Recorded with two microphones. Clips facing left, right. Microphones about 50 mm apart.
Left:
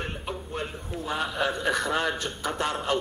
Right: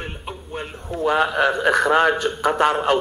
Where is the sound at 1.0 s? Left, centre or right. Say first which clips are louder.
Right 10 dB; right.